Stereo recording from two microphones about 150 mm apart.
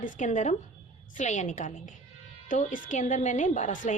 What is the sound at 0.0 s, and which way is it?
A woman's voice, 60° left (ahead or behind).